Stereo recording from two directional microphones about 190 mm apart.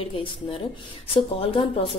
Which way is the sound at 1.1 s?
30° left (ahead or behind).